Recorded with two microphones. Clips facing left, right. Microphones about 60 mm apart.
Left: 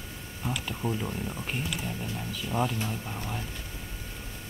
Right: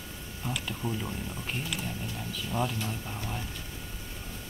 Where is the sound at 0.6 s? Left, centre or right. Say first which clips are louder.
Left 2 dB; centre.